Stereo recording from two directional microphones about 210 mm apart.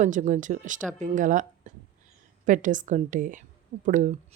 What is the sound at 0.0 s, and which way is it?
Speech, 35° right (ahead or behind).